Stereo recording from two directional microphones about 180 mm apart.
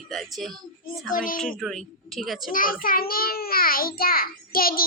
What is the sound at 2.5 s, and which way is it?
A child's voice, 50° left (ahead or behind).